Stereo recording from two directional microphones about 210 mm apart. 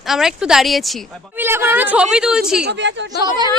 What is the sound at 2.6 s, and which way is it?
Speech, 60° right (ahead or behind).